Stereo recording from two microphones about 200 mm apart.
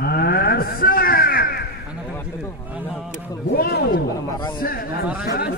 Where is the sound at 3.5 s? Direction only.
50° left (ahead or behind).